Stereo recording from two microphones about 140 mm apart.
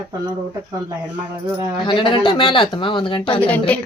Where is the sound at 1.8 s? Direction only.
35° left (ahead or behind).